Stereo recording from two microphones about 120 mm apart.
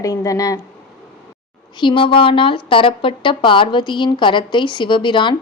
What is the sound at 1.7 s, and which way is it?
A woman's voice, 45° left (ahead or behind).